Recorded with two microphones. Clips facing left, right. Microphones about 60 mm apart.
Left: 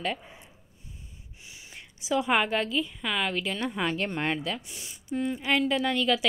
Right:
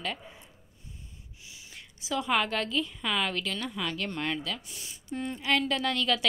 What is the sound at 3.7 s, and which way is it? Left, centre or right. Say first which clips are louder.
A woman's voice: left 4 dB; left.